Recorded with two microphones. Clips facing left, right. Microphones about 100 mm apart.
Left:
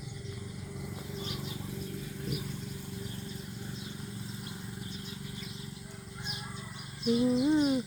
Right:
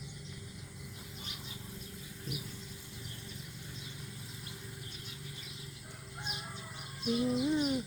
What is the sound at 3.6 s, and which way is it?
Vehicle, 35° left (ahead or behind).